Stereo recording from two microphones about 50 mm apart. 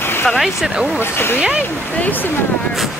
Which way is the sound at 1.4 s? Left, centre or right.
Right.